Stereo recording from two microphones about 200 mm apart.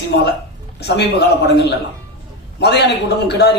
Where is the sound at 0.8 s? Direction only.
60° left (ahead or behind).